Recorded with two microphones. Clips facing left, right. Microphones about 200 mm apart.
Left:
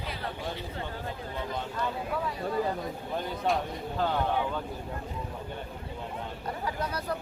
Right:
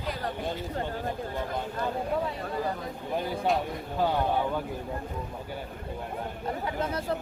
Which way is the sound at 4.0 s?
10° right (ahead or behind).